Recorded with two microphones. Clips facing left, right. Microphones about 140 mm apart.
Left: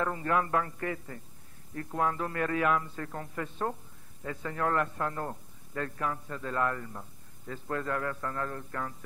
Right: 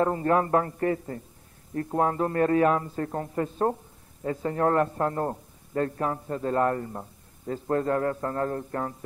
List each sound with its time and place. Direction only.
0.0 s a man's voice: 35° right (ahead or behind)